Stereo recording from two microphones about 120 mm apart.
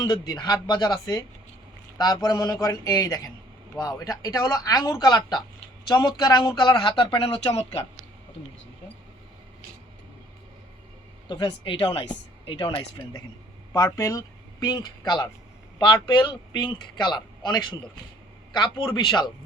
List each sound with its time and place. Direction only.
0.0 s speech: 30° left (ahead or behind); by 7.8 s 55° left (ahead or behind)
11.3 s speech: 40° left (ahead or behind)
13.7 s speech: 25° left (ahead or behind)
18.9 s speech: 40° left (ahead or behind)